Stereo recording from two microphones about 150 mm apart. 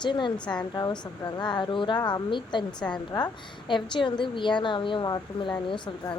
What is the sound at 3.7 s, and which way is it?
A woman's voice, 30° left (ahead or behind).